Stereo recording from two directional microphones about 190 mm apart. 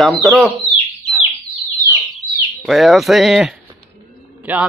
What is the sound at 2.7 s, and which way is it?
Speech, centre (ahead or behind).